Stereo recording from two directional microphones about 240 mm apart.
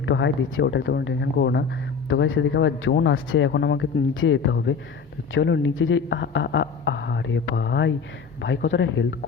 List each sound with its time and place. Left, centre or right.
0.0 s speech: left